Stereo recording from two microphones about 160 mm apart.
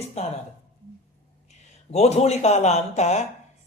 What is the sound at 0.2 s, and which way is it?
Speech, 40° left (ahead or behind).